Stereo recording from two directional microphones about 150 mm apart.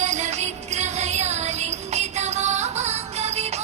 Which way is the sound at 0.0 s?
50° right (ahead or behind).